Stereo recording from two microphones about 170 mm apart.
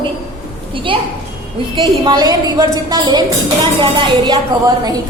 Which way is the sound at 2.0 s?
25° right (ahead or behind).